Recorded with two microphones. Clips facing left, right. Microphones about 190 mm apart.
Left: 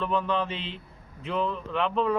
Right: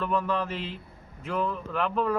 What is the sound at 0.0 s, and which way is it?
Speech, 5° right (ahead or behind).